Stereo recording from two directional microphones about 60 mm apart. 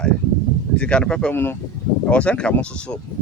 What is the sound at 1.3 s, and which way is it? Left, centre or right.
Speech, left.